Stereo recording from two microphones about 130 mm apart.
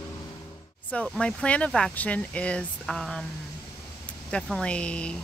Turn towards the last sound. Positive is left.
turn(degrees=10)  # may be behind; listen again after turning